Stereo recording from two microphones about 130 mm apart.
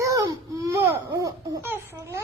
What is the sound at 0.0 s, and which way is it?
Baby cry, 25° right (ahead or behind).